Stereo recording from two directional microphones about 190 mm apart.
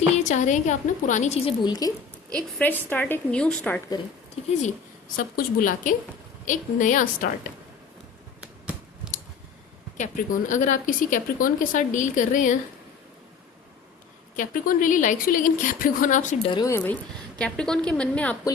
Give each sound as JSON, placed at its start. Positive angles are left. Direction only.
{"t": 0.3, "sound": "a woman's voice", "side_deg": 40}
{"t": 1.6, "sound": "speech", "side_deg": 20}
{"t": 2.3, "sound": "a woman's voice", "side_deg": 10}
{"t": 5.1, "sound": "speech", "side_deg": 45}
{"t": 10.0, "sound": "speech", "side_deg": 40}
{"t": 14.3, "sound": "speech", "side_deg": 45}
{"t": 16.5, "sound": "a woman's voice", "side_deg": 20}